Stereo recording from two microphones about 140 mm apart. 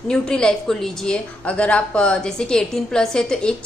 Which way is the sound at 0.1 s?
5° left (ahead or behind).